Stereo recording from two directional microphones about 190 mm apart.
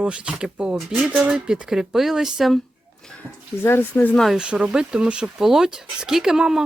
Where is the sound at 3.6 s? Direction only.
10° left (ahead or behind).